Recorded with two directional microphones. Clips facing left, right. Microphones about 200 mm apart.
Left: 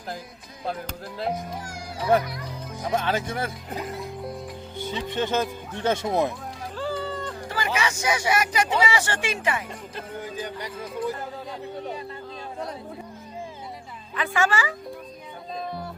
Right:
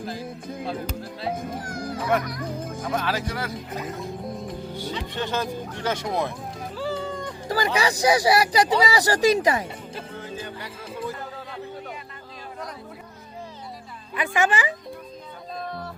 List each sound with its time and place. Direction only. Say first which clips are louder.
1.4 s speech: right 4 dB; 50° right (ahead or behind)
1.9 s children playing: left 3 dB; 30° left (ahead or behind)
2.4 s speech: right 5 dB; 50° right (ahead or behind)
2.9 s speech: left 2 dB; 25° left (ahead or behind)
4.9 s speech: left 4 dB; 20° left (ahead or behind)
6.7 s a sound: even; 10° right (ahead or behind)
7.4 s speech: right 5 dB; 35° right (ahead or behind)
10.2 s speech: left 4 dB; 15° left (ahead or behind)
14.2 s a woman's voice: right 1 dB; 15° right (ahead or behind)